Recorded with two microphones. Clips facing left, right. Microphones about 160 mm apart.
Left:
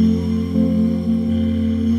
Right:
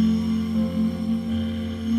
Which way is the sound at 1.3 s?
40° left (ahead or behind).